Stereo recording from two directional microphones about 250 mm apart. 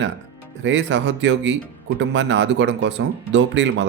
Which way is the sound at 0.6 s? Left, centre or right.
Right.